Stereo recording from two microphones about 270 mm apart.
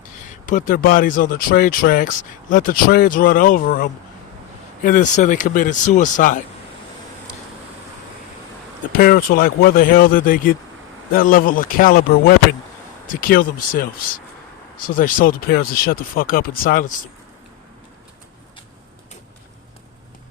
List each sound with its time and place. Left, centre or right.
0.4 s speech: left
9.0 s speech: left
13.1 s speech: left
14.8 s speech: left